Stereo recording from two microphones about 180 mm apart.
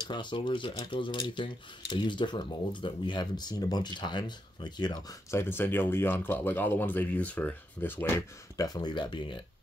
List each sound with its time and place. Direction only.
0.1 s speech: 25° left (ahead or behind)
5.4 s speech: 10° left (ahead or behind); by 9.4 s 25° left (ahead or behind)